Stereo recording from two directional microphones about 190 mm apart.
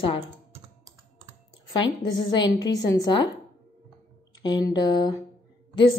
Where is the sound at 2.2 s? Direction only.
20° left (ahead or behind).